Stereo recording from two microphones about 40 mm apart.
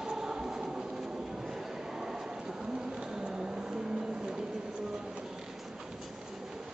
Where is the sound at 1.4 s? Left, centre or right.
Centre.